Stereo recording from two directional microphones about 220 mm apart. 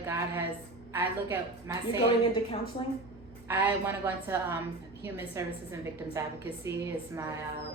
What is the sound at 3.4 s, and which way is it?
A woman's voice, 10° right (ahead or behind).